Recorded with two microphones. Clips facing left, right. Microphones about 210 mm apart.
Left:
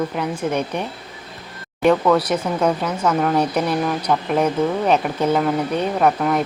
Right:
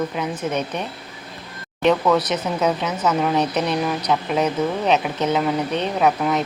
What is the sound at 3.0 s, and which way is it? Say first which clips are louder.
Speech: left 1 dB; 5° right (ahead or behind).